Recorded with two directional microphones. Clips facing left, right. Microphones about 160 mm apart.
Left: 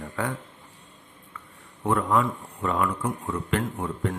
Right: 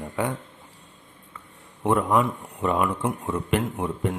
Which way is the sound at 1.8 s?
20° right (ahead or behind).